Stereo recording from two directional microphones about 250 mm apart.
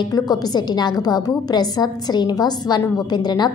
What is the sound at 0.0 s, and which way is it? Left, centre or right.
A woman's voice, centre.